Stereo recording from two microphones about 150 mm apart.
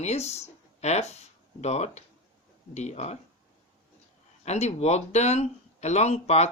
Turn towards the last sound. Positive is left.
turn(degrees=45)  # may be behind; listen again after turning